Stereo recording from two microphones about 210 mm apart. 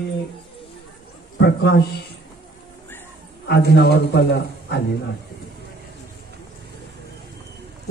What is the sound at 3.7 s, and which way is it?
A man's voice, 50° left (ahead or behind).